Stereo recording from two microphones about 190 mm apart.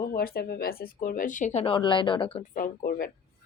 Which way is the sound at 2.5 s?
50° left (ahead or behind).